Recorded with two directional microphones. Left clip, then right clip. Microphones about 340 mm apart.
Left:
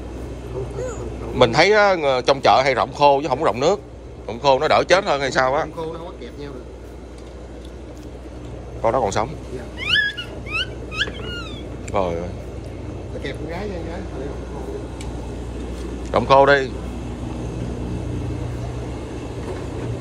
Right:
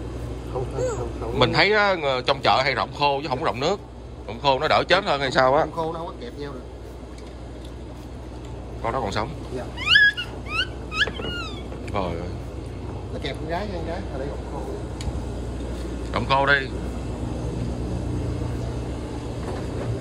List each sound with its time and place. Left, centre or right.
1.3 s a man's voice: centre
8.8 s a man's voice: centre
9.8 s cat: right
11.9 s speech: centre
16.1 s a man's voice: centre